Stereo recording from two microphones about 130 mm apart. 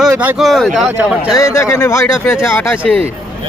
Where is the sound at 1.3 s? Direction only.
25° left (ahead or behind).